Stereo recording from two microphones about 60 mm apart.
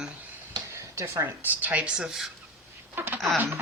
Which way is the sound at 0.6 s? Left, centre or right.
Right.